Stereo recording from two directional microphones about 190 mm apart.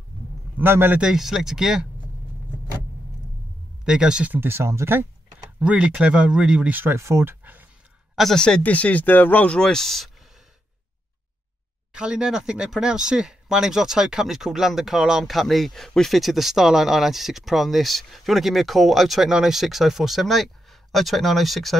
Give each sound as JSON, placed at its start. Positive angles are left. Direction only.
{"t": 0.6, "sound": "speech", "side_deg": -10}
{"t": 3.8, "sound": "speech", "side_deg": -5}
{"t": 8.2, "sound": "speech", "side_deg": 5}
{"t": 11.9, "sound": "speech", "side_deg": -5}